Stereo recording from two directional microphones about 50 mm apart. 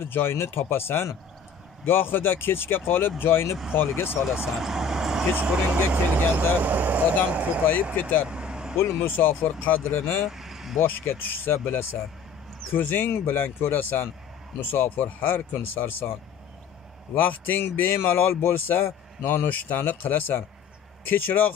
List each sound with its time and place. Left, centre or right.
0.0 s speech: left
4.5 s vehicle: centre
5.3 s speech: right
5.9 s speech: right
7.9 s speech: left
8.3 s vehicle: centre
9.2 s speech: left
9.9 s speech: left
10.3 s vehicle: centre
10.8 s speech: left
17.1 s speech: left
19.2 s speech: left